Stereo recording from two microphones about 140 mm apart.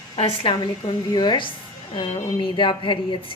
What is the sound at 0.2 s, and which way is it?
Speech, 40° left (ahead or behind).